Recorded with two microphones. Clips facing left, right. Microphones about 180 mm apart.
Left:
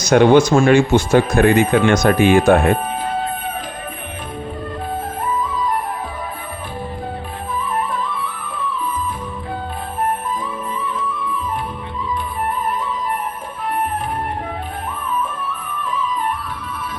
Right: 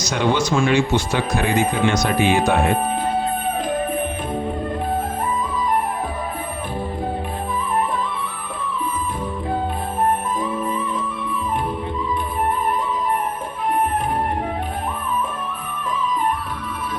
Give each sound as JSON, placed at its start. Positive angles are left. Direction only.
{"t": 0.0, "sound": "speech", "side_deg": 55}